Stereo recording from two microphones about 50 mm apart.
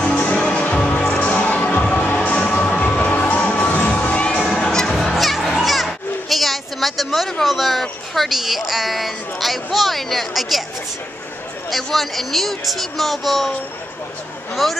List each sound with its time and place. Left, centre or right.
0.0 s music: left
1.2 s crowd: left
3.3 s children shouting: left
4.0 s crowd: left
4.5 s music: centre
5.6 s children playing: centre
5.9 s a sound: centre
7.4 s a woman's voice: centre
11.7 s a woman's voice: centre
14.5 s a woman's voice: centre